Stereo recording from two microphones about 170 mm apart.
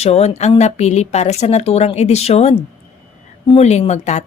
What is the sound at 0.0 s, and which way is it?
A woman's voice, 40° left (ahead or behind).